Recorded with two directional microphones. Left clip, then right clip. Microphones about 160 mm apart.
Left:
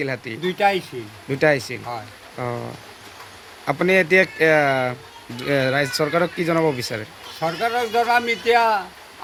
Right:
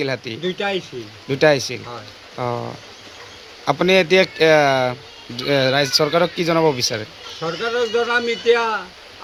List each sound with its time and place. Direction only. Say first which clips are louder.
0.0 s speech: right 3 dB; 5° right (ahead or behind)
0.4 s speech: left 4 dB; 20° left (ahead or behind)
1.3 s speech: right 3 dB; 5° right (ahead or behind)
7.8 s speech: even; 20° left (ahead or behind)